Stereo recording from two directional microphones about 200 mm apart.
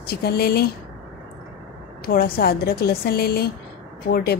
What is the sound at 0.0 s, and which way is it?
Speech, 50° left (ahead or behind).